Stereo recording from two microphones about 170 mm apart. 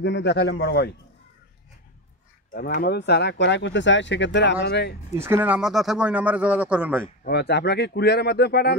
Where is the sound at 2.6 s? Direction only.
65° left (ahead or behind); by 4.9 s 90° left.